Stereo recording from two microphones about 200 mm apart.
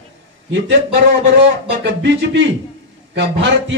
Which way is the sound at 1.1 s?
60° right (ahead or behind).